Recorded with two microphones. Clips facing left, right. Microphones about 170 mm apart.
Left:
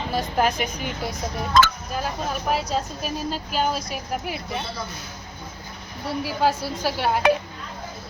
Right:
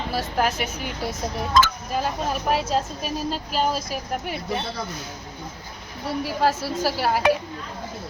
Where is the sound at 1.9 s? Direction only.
Centre (ahead or behind).